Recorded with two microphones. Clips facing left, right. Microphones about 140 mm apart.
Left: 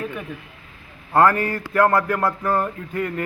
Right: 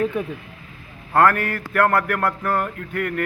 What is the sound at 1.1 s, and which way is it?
Speech, 20° left (ahead or behind).